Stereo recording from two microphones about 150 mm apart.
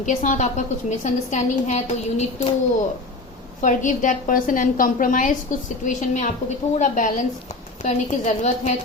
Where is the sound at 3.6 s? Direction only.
60° left (ahead or behind).